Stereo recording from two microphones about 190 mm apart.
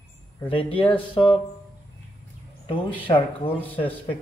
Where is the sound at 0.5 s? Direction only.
30° left (ahead or behind).